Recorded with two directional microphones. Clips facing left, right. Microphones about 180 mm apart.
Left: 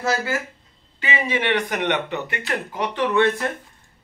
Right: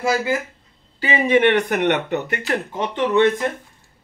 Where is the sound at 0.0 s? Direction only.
15° right (ahead or behind).